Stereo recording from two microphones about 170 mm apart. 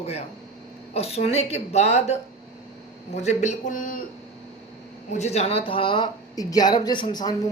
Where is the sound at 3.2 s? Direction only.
45° left (ahead or behind).